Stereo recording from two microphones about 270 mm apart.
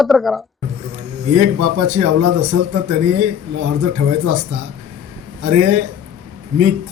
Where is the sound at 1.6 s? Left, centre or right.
Right.